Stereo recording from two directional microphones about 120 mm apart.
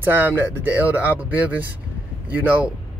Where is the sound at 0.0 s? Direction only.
15° right (ahead or behind).